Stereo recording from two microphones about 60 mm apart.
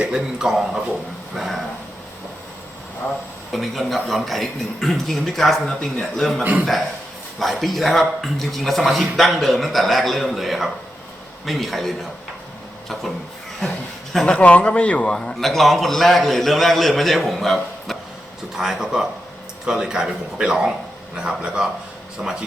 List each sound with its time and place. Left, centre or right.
0.0 s a man's voice: centre
3.0 s speech: left
3.5 s a man's voice: centre
6.4 s a man's voice: right
7.3 s a man's voice: centre
14.3 s speech: left
15.1 s a man's voice: centre